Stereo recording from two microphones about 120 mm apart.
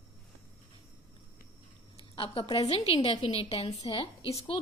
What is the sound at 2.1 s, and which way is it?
A woman's voice, 50° left (ahead or behind).